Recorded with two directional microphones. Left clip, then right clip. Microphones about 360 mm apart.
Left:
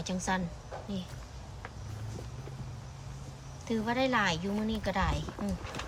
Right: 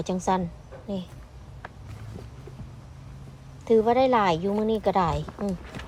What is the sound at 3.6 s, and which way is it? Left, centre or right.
Speech, centre.